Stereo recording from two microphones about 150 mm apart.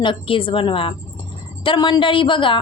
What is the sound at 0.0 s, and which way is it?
A woman's voice, 35° left (ahead or behind).